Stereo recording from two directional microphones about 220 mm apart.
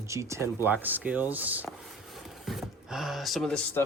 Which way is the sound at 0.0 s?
15° right (ahead or behind).